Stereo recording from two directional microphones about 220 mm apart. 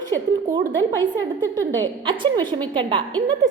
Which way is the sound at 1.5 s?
20° right (ahead or behind).